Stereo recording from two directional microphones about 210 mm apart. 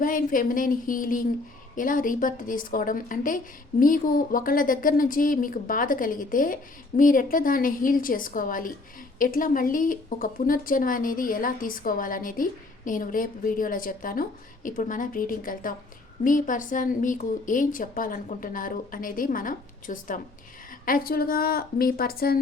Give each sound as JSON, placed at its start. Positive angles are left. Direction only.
{"t": 0.0, "sound": "a woman's voice", "side_deg": 40}